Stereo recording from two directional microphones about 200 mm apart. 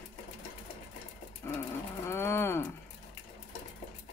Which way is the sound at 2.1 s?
10° left (ahead or behind).